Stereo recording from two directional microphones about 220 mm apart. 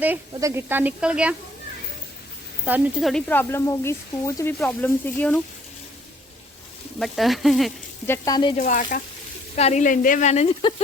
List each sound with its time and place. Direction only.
0.0 s speech: 10° right (ahead or behind)
2.6 s speech: 5° right (ahead or behind)
7.0 s speech: centre (ahead or behind)
8.0 s speech: 15° left (ahead or behind)
8.5 s speech: 35° left (ahead or behind)